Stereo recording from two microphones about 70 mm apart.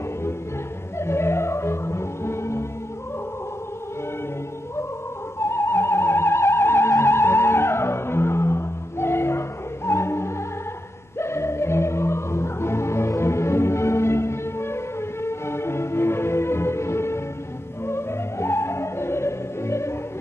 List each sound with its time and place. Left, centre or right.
0.9 s music: left
5.4 s music: left